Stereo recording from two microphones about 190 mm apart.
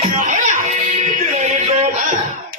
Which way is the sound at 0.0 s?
45° right (ahead or behind).